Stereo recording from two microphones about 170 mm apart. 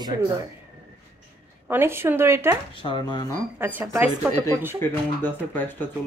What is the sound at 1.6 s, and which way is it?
Speech, 15° right (ahead or behind).